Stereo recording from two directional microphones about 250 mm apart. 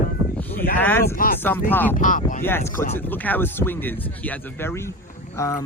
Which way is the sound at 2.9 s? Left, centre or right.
Centre.